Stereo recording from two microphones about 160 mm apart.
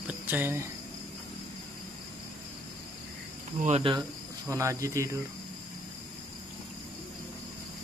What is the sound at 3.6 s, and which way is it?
Speech, 40° right (ahead or behind).